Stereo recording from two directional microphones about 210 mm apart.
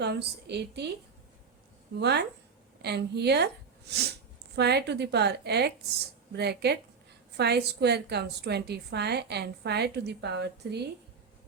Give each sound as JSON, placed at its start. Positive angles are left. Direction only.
{"t": 0.0, "sound": "a woman's voice", "side_deg": -55}
{"t": 2.0, "sound": "a woman's voice", "side_deg": -50}